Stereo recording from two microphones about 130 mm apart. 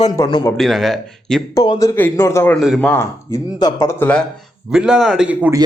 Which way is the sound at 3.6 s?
25° left (ahead or behind).